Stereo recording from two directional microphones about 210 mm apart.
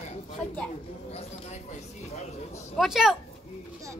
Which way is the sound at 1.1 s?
30° left (ahead or behind).